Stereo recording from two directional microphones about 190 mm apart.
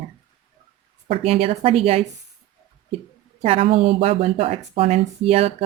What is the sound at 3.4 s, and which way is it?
A woman's voice, 30° right (ahead or behind).